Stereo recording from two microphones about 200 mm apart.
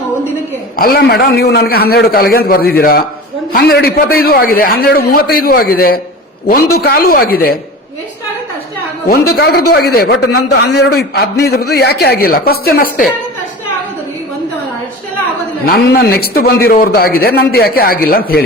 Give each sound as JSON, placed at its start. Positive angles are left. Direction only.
{"t": 0.8, "sound": "a man's voice", "side_deg": 50}
{"t": 9.3, "sound": "a man's voice", "side_deg": 50}
{"t": 15.6, "sound": "a man's voice", "side_deg": 50}